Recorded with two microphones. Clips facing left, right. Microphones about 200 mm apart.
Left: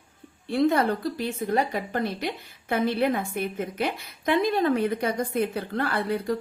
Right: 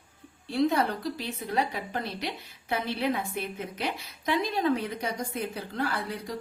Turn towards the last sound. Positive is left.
turn(degrees=55)  # may be behind; listen again after turning